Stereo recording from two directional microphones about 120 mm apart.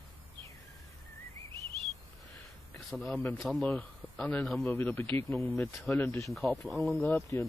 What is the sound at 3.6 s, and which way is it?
Speech, 10° left (ahead or behind).